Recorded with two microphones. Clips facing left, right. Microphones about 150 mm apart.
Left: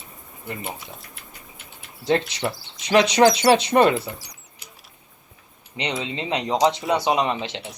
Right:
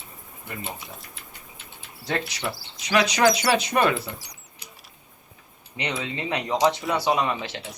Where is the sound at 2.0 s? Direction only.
25° left (ahead or behind).